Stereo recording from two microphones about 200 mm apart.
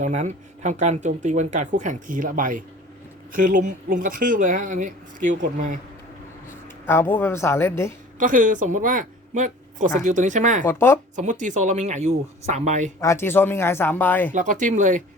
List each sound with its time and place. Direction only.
0.0 s speech: 35° right (ahead or behind)
6.8 s speech: 10° left (ahead or behind)
8.2 s speech: 40° right (ahead or behind)
10.6 s speech: 10° left (ahead or behind)
11.2 s speech: 40° right (ahead or behind)
13.0 s speech: 15° left (ahead or behind)
14.3 s speech: 40° right (ahead or behind)